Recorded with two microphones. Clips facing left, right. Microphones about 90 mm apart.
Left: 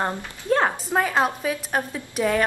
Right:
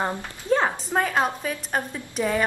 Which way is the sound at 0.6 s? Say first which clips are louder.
Left 1 dB; 5° left (ahead or behind).